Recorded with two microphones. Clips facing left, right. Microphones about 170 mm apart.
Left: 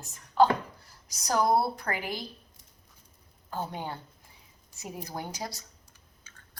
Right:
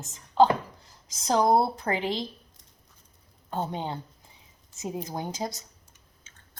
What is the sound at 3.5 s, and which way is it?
Speech, 25° right (ahead or behind).